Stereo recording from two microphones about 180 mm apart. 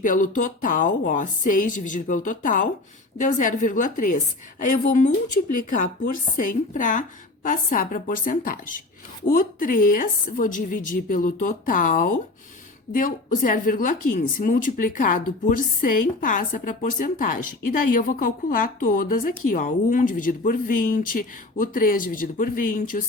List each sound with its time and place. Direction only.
0.0 s speech: 45° left (ahead or behind)